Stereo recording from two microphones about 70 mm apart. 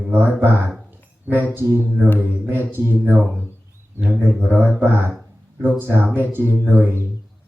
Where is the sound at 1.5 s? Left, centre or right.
Right.